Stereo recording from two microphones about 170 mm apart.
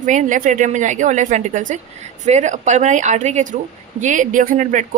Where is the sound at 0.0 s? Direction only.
50° right (ahead or behind).